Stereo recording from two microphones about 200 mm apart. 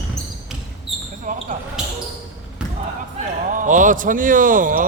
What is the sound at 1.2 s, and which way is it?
Basketball bounce, 40° right (ahead or behind).